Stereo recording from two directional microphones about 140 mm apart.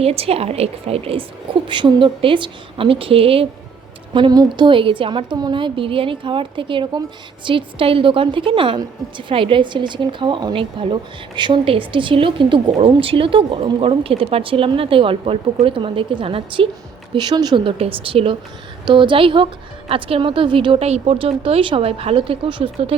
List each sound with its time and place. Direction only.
0.0 s a woman's voice: 45° right (ahead or behind)
4.1 s speech: 30° right (ahead or behind)